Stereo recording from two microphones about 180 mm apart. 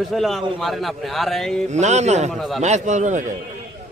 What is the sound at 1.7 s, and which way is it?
Speech, 40° right (ahead or behind).